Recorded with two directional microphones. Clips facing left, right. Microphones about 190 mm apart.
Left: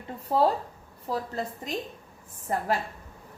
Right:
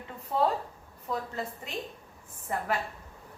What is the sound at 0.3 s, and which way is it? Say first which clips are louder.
Speech: left 4 dB; 35° left (ahead or behind).